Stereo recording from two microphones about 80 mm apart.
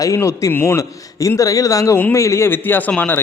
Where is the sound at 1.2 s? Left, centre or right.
Left.